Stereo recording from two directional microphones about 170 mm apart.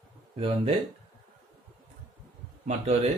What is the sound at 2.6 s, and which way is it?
Speech, 40° right (ahead or behind).